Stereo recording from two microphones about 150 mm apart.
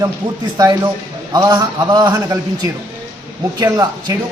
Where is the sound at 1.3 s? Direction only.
25° right (ahead or behind).